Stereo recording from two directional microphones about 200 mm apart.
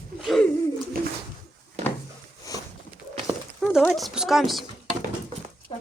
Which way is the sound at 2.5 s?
15° left (ahead or behind).